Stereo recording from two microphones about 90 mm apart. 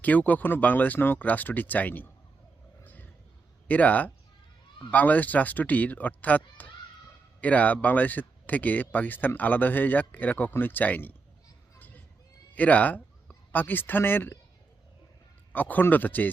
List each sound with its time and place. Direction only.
0.0 s speech: 20° left (ahead or behind)
2.8 s roaring cats: 20° left (ahead or behind)
3.7 s speech: 15° left (ahead or behind)
11.8 s a sound: 20° left (ahead or behind)
12.5 s speech: 15° left (ahead or behind)
15.5 s speech: 20° left (ahead or behind)